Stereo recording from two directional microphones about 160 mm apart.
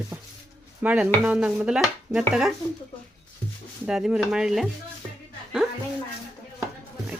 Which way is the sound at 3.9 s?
5° right (ahead or behind).